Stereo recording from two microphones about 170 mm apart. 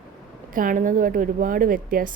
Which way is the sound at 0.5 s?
50° right (ahead or behind).